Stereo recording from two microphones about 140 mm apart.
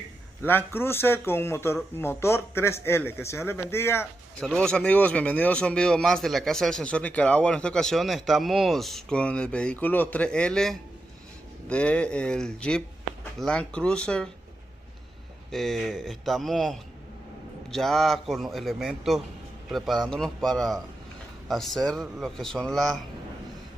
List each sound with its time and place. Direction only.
0.4 s speech: 15° left (ahead or behind)
4.4 s speech: 5° left (ahead or behind)
15.5 s a man's voice: centre (ahead or behind)